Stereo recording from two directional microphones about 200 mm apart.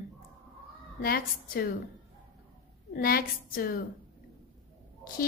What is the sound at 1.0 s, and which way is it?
Speech, 45° left (ahead or behind).